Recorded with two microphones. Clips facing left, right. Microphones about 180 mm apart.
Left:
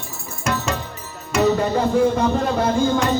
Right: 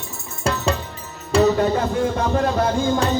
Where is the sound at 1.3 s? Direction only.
30° right (ahead or behind).